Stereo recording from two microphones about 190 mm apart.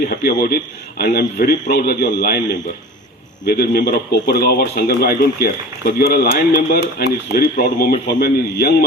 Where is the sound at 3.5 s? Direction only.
55° left (ahead or behind).